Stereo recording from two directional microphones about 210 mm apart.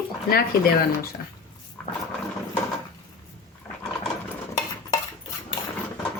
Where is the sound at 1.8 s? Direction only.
5° left (ahead or behind).